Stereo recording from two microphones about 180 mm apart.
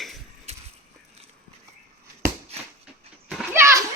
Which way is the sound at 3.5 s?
15° right (ahead or behind).